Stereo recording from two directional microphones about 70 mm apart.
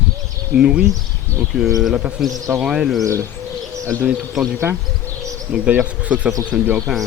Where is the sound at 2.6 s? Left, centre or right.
Centre.